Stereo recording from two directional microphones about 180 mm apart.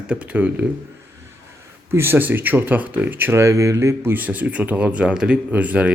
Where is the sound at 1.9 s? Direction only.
10° right (ahead or behind).